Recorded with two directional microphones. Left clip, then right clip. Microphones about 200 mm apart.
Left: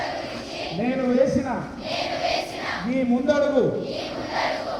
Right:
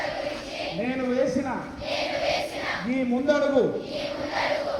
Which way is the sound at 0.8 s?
55° left (ahead or behind).